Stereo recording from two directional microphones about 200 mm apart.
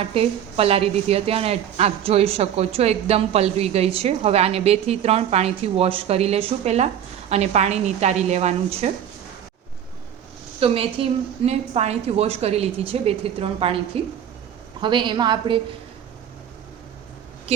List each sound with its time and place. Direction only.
0.0 s a woman's voice: 30° right (ahead or behind)
10.6 s a woman's voice: 25° right (ahead or behind)